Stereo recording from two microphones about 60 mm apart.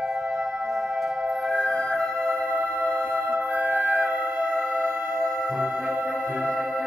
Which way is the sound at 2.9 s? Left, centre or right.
Right.